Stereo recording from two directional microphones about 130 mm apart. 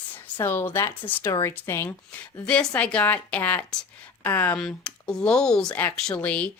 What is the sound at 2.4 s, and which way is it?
Speech, 10° left (ahead or behind).